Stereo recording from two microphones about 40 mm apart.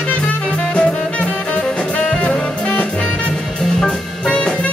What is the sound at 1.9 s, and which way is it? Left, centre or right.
Jazz, left.